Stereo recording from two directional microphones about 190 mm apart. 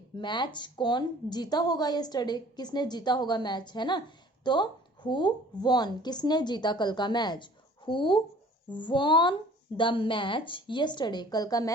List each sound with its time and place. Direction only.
0.2 s speech: 25° left (ahead or behind)